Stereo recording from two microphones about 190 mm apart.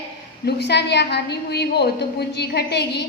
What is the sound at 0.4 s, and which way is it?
A woman's voice, 60° left (ahead or behind).